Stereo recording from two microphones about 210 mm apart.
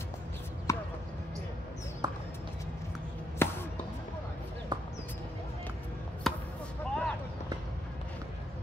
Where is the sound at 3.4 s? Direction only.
10° left (ahead or behind).